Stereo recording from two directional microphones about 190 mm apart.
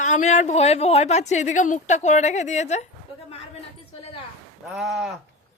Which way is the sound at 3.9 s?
30° left (ahead or behind).